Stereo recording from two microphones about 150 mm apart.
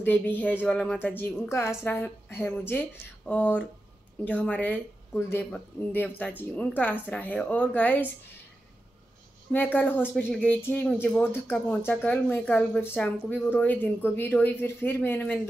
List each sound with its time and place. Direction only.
0.0 s a woman's voice: 10° left (ahead or behind)
9.5 s a woman's voice: 10° left (ahead or behind)